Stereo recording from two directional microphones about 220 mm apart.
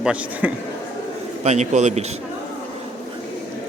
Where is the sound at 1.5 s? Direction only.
30° right (ahead or behind).